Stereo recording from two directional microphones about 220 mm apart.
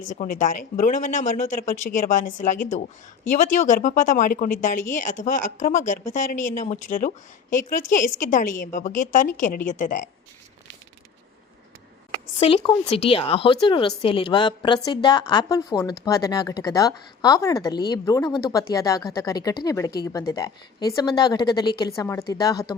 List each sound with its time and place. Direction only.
0.1 s speech: 35° left (ahead or behind)
12.4 s a woman's voice: 25° left (ahead or behind)